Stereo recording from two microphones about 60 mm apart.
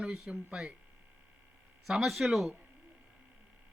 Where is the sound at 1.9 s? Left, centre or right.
Centre.